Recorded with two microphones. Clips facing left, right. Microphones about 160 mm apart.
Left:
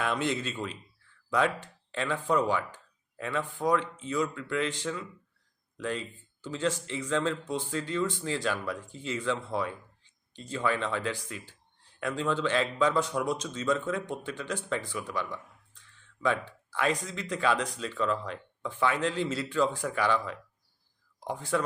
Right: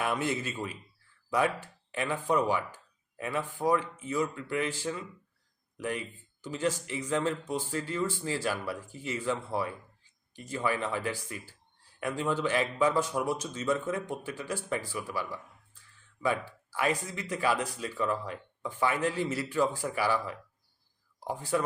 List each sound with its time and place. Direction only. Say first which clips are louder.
0.3 s speech: left 1 dB; 10° right (ahead or behind)
13.4 s speech: left 1 dB; 70° left (ahead or behind)
13.7 s speech: left 1 dB; 10° right (ahead or behind)